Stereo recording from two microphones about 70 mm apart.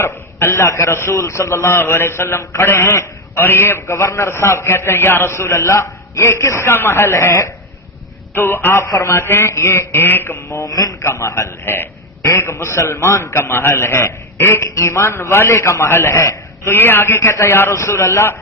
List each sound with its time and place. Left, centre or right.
0.0 s a man's voice: left
8.8 s speech: left
9.1 s a man's voice: left
10.7 s a man's voice: left
11.0 s a man's voice: left
16.7 s a man's voice: left